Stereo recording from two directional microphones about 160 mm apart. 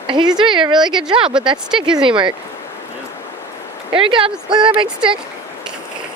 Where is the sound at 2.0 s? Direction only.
30° right (ahead or behind).